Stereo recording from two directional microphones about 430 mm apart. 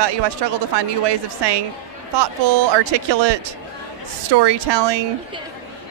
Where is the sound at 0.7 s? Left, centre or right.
Right.